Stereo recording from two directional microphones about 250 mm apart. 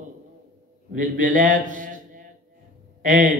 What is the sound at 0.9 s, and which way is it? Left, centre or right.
A man's voice, right.